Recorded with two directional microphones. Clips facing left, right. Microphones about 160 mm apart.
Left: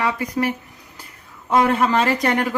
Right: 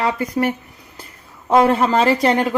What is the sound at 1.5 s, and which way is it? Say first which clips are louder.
Speech: right 3 dB; 35° right (ahead or behind).